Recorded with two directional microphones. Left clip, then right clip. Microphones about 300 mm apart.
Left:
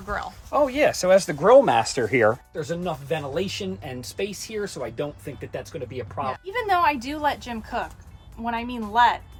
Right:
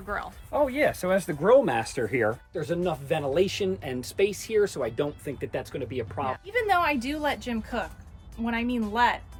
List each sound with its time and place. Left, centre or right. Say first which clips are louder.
0.0 s speech: left 3 dB; centre
0.5 s speech: left 4 dB; centre
2.6 s speech: even; centre